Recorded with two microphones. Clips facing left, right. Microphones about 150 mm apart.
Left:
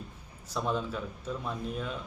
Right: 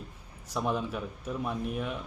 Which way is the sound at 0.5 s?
5° right (ahead or behind).